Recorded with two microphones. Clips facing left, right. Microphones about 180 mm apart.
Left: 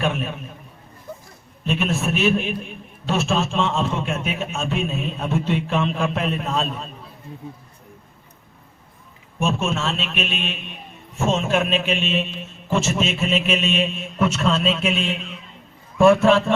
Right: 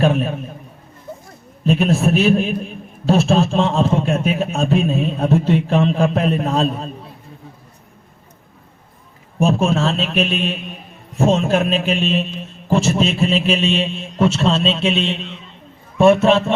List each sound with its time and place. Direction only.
0.0 s a man's voice: 35° right (ahead or behind)
1.6 s a man's voice: 35° right (ahead or behind)
9.4 s a man's voice: 35° right (ahead or behind)